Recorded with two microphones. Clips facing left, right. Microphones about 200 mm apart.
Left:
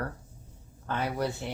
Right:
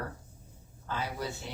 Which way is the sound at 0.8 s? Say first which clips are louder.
Left 5 dB; 60° left (ahead or behind).